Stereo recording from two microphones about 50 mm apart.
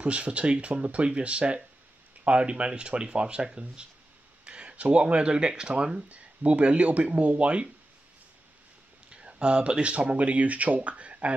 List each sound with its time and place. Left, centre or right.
0.0 s speech: right
9.1 s speech: centre